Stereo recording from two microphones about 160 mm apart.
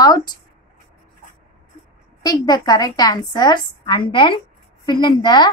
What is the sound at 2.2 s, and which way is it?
A woman's voice, 25° left (ahead or behind).